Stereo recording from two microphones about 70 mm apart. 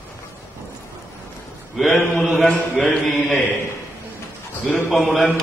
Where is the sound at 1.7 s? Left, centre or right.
Centre.